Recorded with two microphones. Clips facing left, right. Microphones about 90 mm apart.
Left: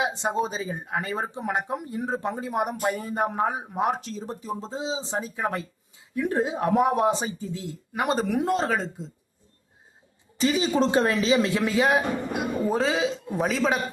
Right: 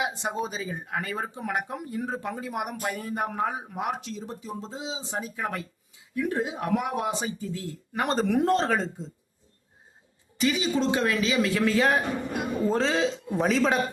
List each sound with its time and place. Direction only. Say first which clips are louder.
0.0 s speech: left 4 dB; 25° left (ahead or behind)
3.8 s speech: left 4 dB; 40° left (ahead or behind)
7.5 s speech: left 1 dB; 20° left (ahead or behind)
8.0 s a man's voice: right 1 dB; 5° left (ahead or behind)
10.3 s a man's voice: left 3 dB; 35° left (ahead or behind); by 13.8 s centre (ahead or behind)